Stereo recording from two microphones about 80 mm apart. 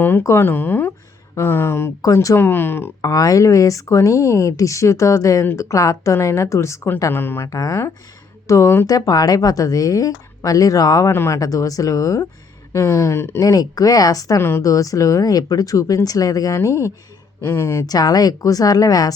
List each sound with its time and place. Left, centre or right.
0.0 s speech: left
3.0 s speech: left
7.1 s speech: left
7.4 s a woman's voice: left
11.1 s speech: left
11.3 s a woman's voice: left
13.4 s a woman's voice: left
17.8 s a woman's voice: left